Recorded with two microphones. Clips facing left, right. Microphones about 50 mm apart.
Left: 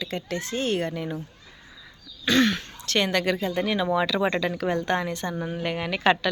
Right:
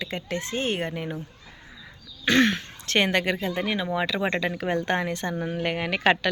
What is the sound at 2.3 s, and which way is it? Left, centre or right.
Speech, right.